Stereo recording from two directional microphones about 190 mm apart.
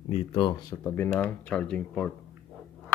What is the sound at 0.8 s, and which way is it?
Speech, 10° left (ahead or behind).